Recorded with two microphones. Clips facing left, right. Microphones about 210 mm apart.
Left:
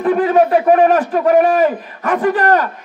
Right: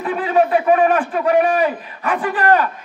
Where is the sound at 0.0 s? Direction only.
45° left (ahead or behind).